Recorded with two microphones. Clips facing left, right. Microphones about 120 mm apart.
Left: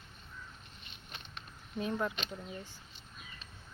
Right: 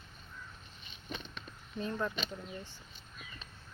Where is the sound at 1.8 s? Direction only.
10° left (ahead or behind).